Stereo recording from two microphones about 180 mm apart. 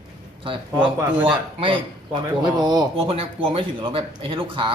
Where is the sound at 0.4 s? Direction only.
30° right (ahead or behind).